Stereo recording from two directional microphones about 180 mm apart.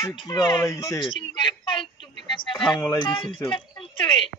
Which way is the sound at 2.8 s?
20° left (ahead or behind).